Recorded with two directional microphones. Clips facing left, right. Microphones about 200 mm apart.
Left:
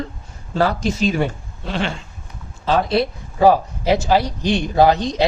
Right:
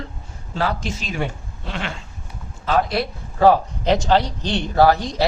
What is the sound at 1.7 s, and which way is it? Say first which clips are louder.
Speech: left 6 dB; 30° left (ahead or behind).